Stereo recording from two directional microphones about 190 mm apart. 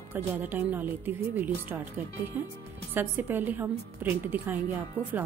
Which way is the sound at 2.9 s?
10° right (ahead or behind).